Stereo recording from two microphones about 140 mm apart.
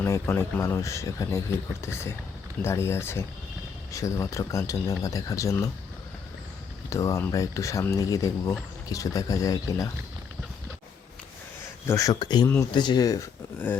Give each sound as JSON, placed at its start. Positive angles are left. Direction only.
{"t": 0.0, "sound": "speech", "side_deg": 15}
{"t": 6.9, "sound": "speech", "side_deg": 20}
{"t": 11.9, "sound": "speech", "side_deg": 25}